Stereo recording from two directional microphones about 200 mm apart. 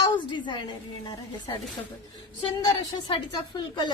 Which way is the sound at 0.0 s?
25° left (ahead or behind).